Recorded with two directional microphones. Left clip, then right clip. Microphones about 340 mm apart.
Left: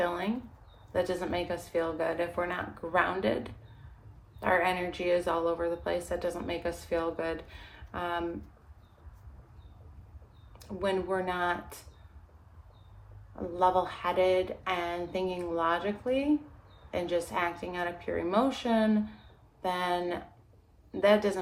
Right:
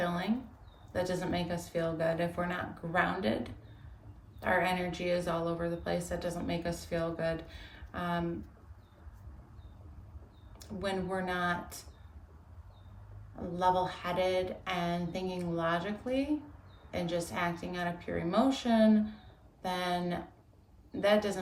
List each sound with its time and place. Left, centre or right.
0.0 s a sound: centre
0.9 s a woman's voice: centre
10.6 s a woman's voice: centre
13.6 s a woman's voice: centre